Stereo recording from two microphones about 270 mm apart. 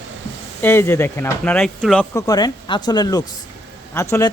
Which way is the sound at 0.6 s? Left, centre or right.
Centre.